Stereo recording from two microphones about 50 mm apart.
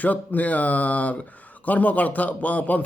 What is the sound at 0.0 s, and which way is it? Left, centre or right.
Speech, left.